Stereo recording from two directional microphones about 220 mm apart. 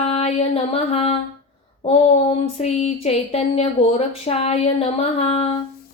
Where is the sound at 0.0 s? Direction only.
30° left (ahead or behind).